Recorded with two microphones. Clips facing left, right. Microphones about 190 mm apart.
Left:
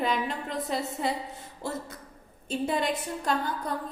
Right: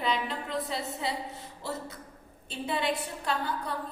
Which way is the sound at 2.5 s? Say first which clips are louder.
Left 3 dB; 45° left (ahead or behind).